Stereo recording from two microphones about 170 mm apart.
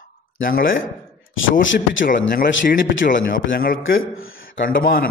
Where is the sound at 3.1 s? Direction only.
60° left (ahead or behind).